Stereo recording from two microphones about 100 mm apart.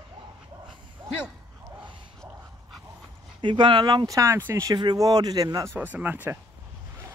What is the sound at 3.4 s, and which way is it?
Speech, 50° right (ahead or behind).